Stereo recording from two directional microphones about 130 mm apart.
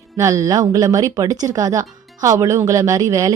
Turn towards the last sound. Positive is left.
turn(degrees=-25)  # may be behind; listen again after turning